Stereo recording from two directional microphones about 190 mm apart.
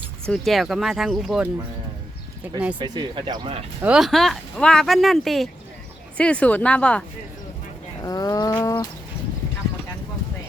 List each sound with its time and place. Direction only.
0.3 s speech: centre (ahead or behind)
2.7 s speech: 25° right (ahead or behind)
3.8 s a woman's voice: 5° right (ahead or behind)
8.0 s bird: 20° left (ahead or behind)